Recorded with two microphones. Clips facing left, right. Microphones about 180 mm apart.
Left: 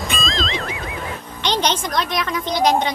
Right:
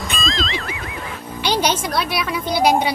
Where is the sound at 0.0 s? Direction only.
Centre (ahead or behind).